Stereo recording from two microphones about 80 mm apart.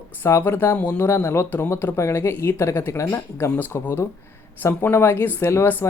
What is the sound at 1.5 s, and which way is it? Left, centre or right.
Speech, left.